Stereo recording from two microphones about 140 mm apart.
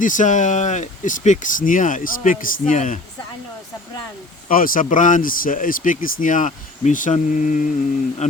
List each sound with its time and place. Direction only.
0.0 s speech: 65° left (ahead or behind)
4.4 s speech: 85° left; by 7.7 s 65° left (ahead or behind)